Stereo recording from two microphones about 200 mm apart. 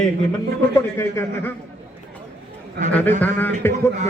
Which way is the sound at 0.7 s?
10° left (ahead or behind).